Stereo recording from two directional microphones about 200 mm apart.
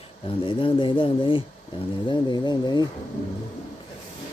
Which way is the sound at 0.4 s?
25° left (ahead or behind).